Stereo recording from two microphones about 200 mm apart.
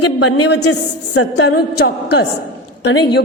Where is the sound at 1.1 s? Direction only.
65° left (ahead or behind).